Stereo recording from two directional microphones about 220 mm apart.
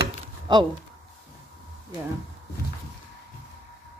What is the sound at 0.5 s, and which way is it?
Speech, 20° right (ahead or behind).